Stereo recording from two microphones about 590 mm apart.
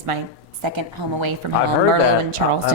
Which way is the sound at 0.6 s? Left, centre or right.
Right.